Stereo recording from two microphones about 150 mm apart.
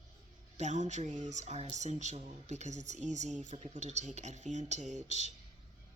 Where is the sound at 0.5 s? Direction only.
55° right (ahead or behind).